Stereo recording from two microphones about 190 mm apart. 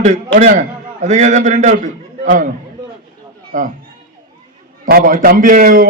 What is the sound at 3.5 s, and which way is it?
Speech, 45° right (ahead or behind).